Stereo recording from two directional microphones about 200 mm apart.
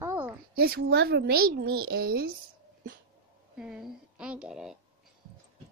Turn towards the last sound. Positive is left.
turn(degrees=-5)  # may be behind; listen again after turning